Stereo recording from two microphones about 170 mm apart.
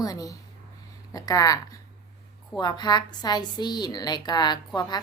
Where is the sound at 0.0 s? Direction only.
20° left (ahead or behind).